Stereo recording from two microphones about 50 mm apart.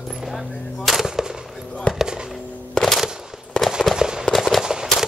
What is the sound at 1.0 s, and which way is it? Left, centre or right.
Fireworks, centre.